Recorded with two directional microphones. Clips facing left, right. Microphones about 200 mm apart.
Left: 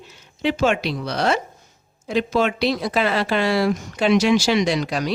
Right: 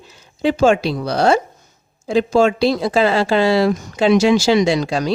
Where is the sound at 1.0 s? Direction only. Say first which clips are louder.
Right 7 dB; 30° right (ahead or behind).